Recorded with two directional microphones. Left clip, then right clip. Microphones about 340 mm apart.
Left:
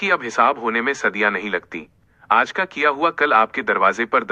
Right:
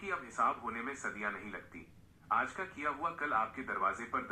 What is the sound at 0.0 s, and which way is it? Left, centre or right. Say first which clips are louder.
Speech: left 17 dB; left.